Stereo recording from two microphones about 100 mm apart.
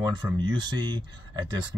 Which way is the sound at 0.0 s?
45° right (ahead or behind).